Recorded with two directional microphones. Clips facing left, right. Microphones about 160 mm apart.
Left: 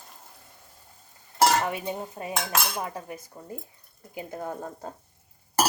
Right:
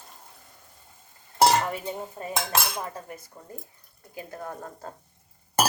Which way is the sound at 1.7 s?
15° left (ahead or behind).